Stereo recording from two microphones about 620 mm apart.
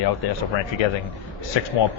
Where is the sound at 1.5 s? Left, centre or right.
Left.